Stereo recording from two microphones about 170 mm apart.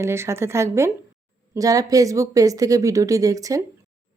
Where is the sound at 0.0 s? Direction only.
15° right (ahead or behind).